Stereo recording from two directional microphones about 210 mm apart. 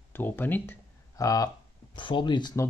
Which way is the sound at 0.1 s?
10° left (ahead or behind).